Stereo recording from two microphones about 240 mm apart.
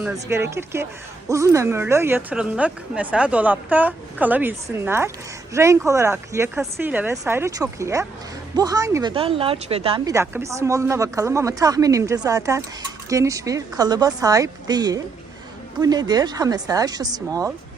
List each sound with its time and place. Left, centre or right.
0.0 s a woman's voice: centre
10.2 s a woman's voice: centre